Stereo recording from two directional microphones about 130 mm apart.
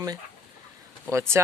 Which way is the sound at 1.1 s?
20° right (ahead or behind).